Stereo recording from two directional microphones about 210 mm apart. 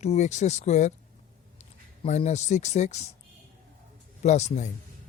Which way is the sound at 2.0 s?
35° left (ahead or behind).